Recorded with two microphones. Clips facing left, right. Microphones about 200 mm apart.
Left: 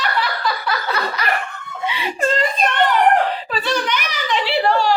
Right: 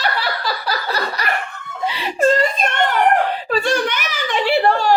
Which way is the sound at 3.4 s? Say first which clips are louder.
Right 3 dB; 50° right (ahead or behind).